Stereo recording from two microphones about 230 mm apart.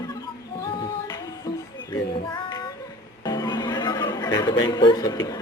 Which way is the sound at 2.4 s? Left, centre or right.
Centre.